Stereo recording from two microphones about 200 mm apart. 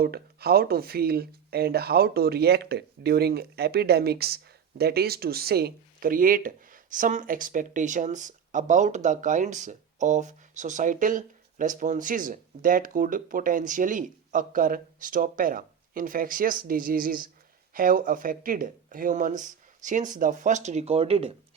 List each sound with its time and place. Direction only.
0.0 s speech: 50° right (ahead or behind); by 21.3 s 30° right (ahead or behind)